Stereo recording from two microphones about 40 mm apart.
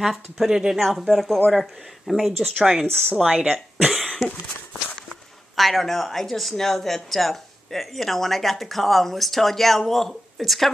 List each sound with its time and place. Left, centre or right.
0.0 s speech: centre
0.5 s speech: centre
0.7 s speech: centre
2.9 s speech: left
3.2 s a woman's voice: centre
3.5 s speech: centre
5.6 s speech: centre